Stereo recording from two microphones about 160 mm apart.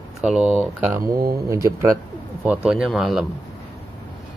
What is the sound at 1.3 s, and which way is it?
Speech, 20° right (ahead or behind).